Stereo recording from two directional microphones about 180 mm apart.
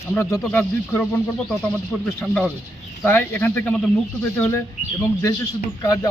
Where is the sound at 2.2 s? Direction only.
10° left (ahead or behind).